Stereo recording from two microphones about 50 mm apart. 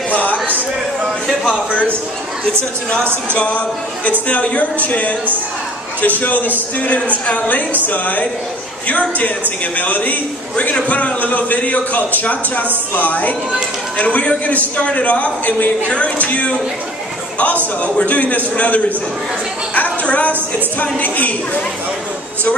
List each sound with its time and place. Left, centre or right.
0.1 s a sound: left
1.7 s a man's voice: left
3.3 s a man's voice: left
17.8 s a man's voice: left
19.7 s a sound: left
20.8 s a man's voice: left